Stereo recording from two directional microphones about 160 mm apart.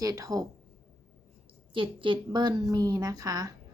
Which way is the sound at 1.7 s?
30° right (ahead or behind).